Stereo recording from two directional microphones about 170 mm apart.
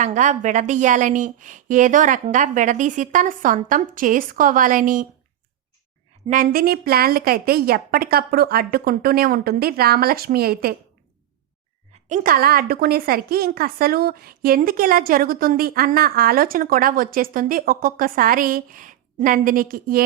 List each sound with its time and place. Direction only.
0.0 s a woman's voice: 45° right (ahead or behind)
6.2 s a woman's voice: 50° right (ahead or behind)
12.0 s a woman's voice: 50° right (ahead or behind)